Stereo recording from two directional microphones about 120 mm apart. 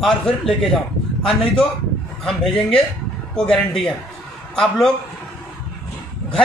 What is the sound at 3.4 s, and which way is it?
Speech, 5° left (ahead or behind).